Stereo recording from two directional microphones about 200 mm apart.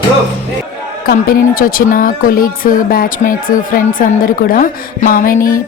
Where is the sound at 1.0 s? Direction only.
50° left (ahead or behind).